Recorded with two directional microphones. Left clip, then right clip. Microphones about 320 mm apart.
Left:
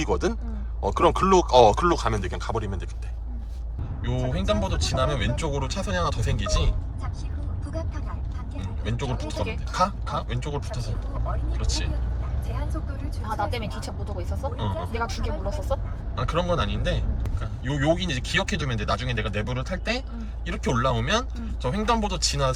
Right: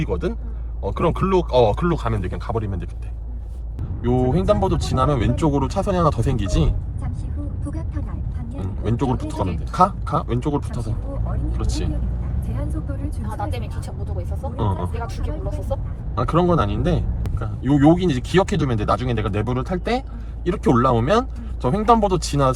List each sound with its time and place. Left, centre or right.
0.0 s speech: centre
4.0 s a man's voice: centre
8.8 s a man's voice: centre
14.5 s a man's voice: centre
15.0 s speech: left
16.1 s a man's voice: centre